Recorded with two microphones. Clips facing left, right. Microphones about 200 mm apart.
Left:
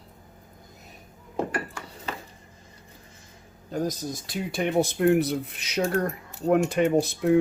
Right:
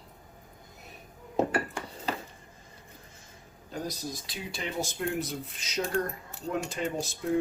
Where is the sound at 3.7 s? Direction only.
45° left (ahead or behind).